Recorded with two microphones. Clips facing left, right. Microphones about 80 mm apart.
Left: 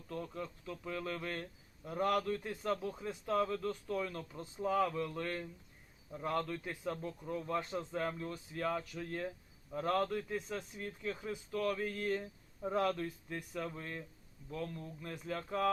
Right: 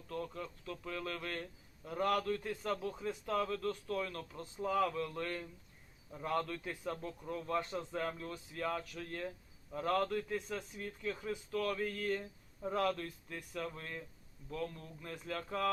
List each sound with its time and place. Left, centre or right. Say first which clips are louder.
0.1 s speech: even; centre
15.2 s speech: left 1 dB; centre